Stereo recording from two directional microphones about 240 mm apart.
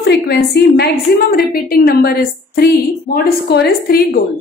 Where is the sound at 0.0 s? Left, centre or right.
Left.